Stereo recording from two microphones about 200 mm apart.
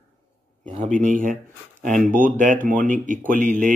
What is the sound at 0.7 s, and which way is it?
Speech, 35° right (ahead or behind).